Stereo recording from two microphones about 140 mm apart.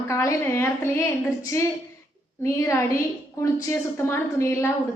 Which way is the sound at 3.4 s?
20° left (ahead or behind).